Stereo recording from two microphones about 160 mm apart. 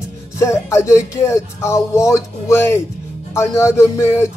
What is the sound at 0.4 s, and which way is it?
Music, 15° left (ahead or behind).